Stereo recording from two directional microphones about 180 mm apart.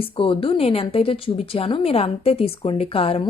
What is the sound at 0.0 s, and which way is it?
A woman's voice, 30° left (ahead or behind).